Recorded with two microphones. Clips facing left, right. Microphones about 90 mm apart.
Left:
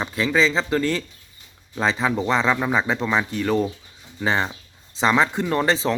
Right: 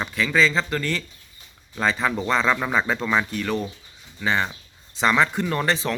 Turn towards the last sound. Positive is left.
turn(degrees=25)  # may be behind; listen again after turning